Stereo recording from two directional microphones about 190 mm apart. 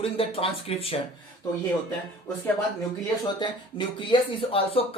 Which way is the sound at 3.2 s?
25° left (ahead or behind).